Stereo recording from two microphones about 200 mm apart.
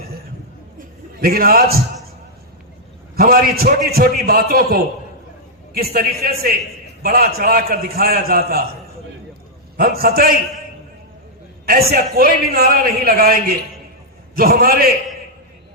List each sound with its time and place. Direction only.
0.8 s a sound: 50° right (ahead or behind)
3.2 s a man's voice: 50° right (ahead or behind)
9.7 s a man's voice: 50° right (ahead or behind)
11.6 s a man's voice: 45° right (ahead or behind)